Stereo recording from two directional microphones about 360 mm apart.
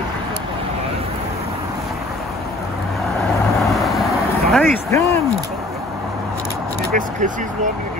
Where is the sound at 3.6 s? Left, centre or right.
Centre.